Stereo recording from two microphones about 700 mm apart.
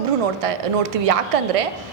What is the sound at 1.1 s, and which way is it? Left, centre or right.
Speech, right.